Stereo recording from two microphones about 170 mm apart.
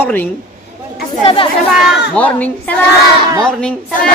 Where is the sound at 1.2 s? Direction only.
30° left (ahead or behind).